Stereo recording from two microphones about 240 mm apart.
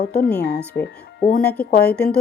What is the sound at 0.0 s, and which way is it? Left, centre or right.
Speech, left.